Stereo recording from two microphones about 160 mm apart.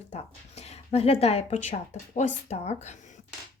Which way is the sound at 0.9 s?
40° left (ahead or behind).